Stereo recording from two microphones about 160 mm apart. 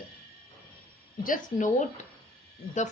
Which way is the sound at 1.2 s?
55° left (ahead or behind).